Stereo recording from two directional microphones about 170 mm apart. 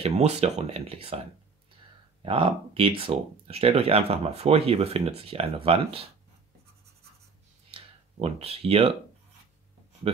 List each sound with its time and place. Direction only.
0.0 s speech: 40° right (ahead or behind)
2.2 s speech: 30° right (ahead or behind)
7.7 s a sound: 35° right (ahead or behind)